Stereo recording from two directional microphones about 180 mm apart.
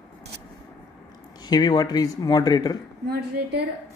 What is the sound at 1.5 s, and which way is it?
Speech, 20° left (ahead or behind).